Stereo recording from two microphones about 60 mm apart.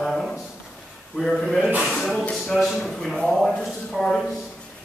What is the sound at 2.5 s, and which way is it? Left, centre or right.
Speech, centre.